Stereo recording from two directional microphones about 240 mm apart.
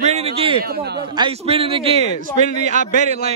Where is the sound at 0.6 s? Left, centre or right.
Right.